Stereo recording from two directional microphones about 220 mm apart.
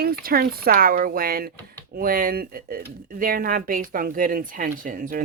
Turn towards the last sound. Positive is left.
turn(degrees=-40)  # may be behind; listen again after turning